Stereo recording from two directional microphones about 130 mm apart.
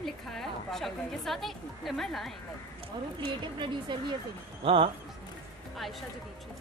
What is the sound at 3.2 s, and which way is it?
Speech, 40° right (ahead or behind).